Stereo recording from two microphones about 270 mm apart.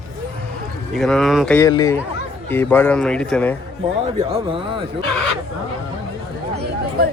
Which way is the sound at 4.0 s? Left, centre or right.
Right.